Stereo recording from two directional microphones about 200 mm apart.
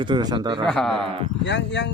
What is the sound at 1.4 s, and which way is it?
Speech, 60° left (ahead or behind).